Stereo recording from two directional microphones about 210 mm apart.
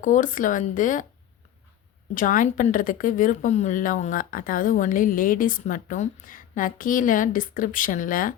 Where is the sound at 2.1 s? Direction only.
40° left (ahead or behind).